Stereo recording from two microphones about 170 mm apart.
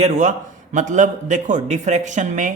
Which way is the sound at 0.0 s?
45° right (ahead or behind).